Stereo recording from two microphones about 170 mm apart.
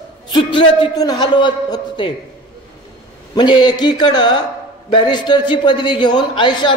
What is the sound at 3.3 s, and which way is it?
A woman's voice, 25° left (ahead or behind).